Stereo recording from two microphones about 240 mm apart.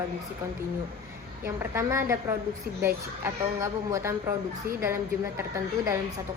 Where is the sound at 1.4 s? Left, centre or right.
Centre.